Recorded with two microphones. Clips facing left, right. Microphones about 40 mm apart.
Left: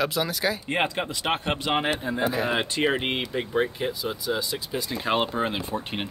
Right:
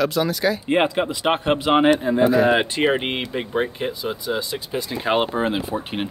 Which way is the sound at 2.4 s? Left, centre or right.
Right.